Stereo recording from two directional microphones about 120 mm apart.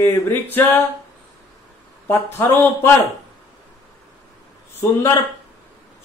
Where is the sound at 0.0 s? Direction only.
20° left (ahead or behind).